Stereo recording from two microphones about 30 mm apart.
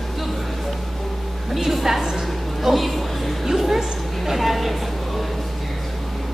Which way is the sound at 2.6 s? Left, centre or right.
Centre.